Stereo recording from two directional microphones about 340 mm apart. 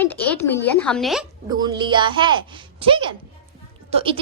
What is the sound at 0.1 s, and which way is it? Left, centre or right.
A woman's voice, centre.